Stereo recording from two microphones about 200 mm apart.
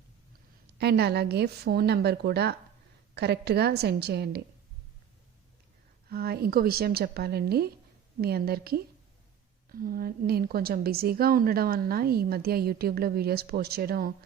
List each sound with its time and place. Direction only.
0.7 s a woman's voice: 55° right (ahead or behind)
6.1 s a woman's voice: 50° right (ahead or behind)